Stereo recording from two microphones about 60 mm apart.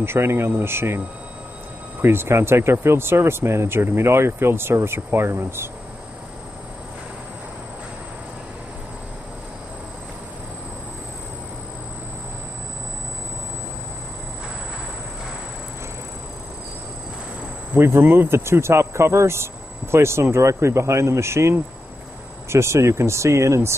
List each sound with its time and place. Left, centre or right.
0.0 s speech: right
17.7 s speech: right